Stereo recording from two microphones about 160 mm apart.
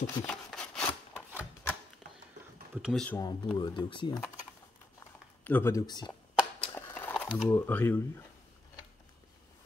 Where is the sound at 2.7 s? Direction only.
5° right (ahead or behind).